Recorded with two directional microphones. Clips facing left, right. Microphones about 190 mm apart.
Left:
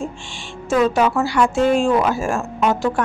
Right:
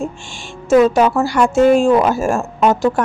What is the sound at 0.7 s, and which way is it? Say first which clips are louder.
A woman's voice: right 5 dB; 40° right (ahead or behind).